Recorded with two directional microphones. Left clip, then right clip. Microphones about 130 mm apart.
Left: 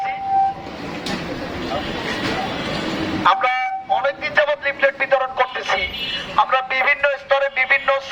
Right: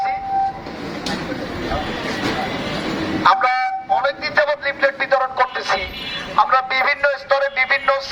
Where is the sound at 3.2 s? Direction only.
10° left (ahead or behind).